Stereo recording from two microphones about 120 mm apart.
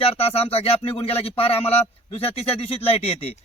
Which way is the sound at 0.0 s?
55° left (ahead or behind).